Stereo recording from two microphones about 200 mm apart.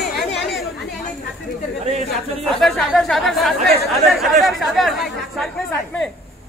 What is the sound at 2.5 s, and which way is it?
Speech, centre (ahead or behind).